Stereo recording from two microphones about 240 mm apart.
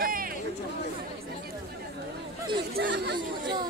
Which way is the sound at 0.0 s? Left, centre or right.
Right.